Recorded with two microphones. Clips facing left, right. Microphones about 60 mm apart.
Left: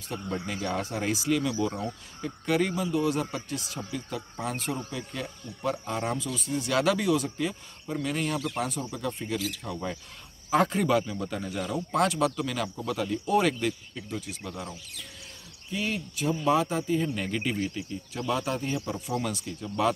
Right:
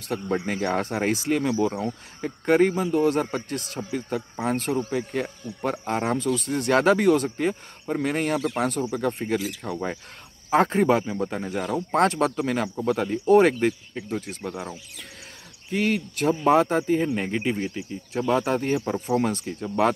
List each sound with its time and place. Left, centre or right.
0.5 s speech: right
15.7 s speech: right
18.1 s speech: right